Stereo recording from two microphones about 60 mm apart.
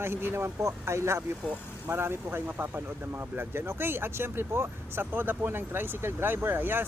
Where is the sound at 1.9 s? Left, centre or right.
Right.